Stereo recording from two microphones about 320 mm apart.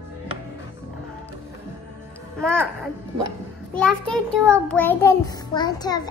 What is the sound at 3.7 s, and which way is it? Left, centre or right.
Speech, centre.